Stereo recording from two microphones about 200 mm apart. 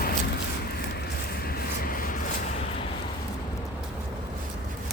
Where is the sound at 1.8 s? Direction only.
45° left (ahead or behind).